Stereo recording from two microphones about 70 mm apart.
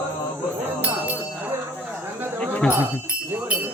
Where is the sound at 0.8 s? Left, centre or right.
Right.